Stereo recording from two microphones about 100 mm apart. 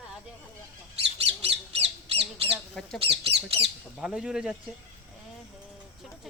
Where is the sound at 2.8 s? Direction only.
5° left (ahead or behind).